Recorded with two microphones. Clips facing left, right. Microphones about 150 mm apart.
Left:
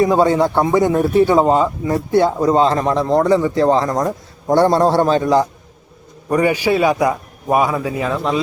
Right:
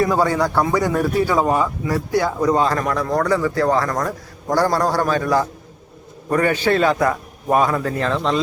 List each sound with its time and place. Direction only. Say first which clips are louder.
0.0 s a man's voice: left 4 dB; 20° left (ahead or behind)